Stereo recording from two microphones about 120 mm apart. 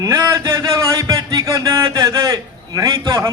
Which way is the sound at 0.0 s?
25° right (ahead or behind).